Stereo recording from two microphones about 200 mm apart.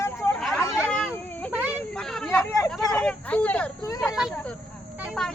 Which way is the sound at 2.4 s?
15° left (ahead or behind).